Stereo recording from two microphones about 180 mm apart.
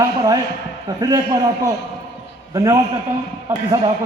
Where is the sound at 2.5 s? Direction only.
20° right (ahead or behind).